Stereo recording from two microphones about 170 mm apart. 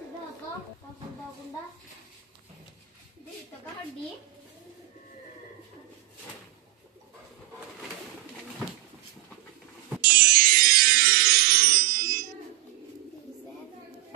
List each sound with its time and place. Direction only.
10.0 s music: 60° right (ahead or behind)